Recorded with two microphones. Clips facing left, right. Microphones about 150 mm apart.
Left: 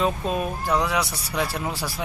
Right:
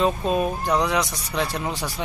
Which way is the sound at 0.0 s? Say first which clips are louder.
Right 3 dB; centre (ahead or behind).